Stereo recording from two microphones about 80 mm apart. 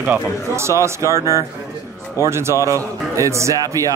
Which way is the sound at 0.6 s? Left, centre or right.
Right.